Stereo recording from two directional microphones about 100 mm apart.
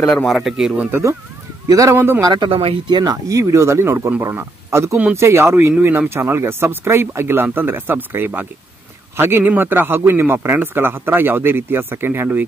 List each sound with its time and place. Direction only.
0.0 s a man's voice: 5° left (ahead or behind)
1.7 s speech: 35° right (ahead or behind)
2.0 s speech: 25° right (ahead or behind)
2.2 s speech: 50° right (ahead or behind)
3.0 s a man's voice: 35° right (ahead or behind)